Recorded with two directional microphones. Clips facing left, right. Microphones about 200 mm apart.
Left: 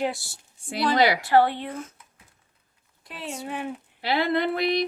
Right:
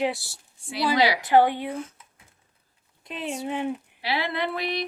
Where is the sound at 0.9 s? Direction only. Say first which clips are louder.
Left 1 dB; 50° left (ahead or behind).